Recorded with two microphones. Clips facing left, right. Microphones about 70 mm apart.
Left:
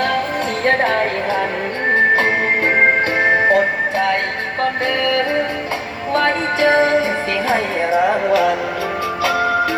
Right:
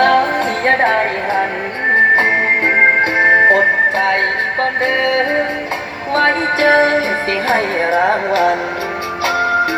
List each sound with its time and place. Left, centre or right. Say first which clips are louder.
0.0 s music: right 7 dB; right
0.3 s music: right 3 dB; right
2.8 s music: right 4 dB; right